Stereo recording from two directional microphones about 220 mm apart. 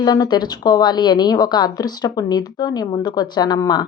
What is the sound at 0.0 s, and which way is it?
A woman's voice, 20° left (ahead or behind).